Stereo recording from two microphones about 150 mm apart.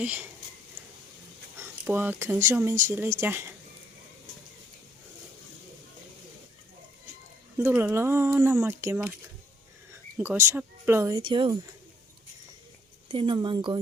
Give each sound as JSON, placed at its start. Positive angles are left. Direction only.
{"t": 0.0, "sound": "speech", "side_deg": -10}
{"t": 1.5, "sound": "speech", "side_deg": -15}
{"t": 7.6, "sound": "speech", "side_deg": -10}
{"t": 10.2, "sound": "speech", "side_deg": -15}
{"t": 11.2, "sound": "speech", "side_deg": -35}
{"t": 13.1, "sound": "speech", "side_deg": -35}